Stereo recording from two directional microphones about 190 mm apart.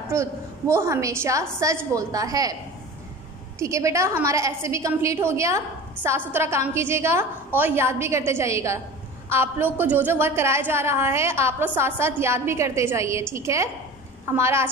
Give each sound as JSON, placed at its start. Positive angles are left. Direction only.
{"t": 0.1, "sound": "a woman's voice", "side_deg": -15}
{"t": 3.5, "sound": "a woman's voice", "side_deg": -15}